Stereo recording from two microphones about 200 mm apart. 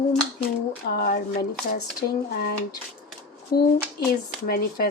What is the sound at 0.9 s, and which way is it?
Speech, 45° left (ahead or behind).